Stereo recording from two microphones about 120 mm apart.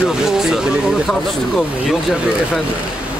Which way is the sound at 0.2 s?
5° right (ahead or behind).